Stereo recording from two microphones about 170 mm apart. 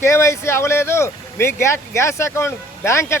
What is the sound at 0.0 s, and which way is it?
Speech, 15° left (ahead or behind).